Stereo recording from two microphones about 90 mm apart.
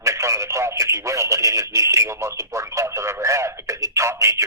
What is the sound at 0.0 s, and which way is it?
Speech, 35° right (ahead or behind).